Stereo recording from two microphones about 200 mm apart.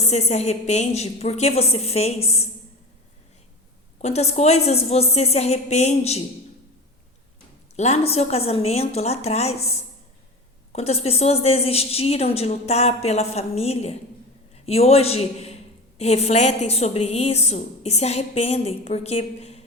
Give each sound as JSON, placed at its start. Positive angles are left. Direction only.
{"t": 0.0, "sound": "a woman's voice", "side_deg": 35}
{"t": 4.0, "sound": "a woman's voice", "side_deg": 35}
{"t": 7.8, "sound": "a woman's voice", "side_deg": 30}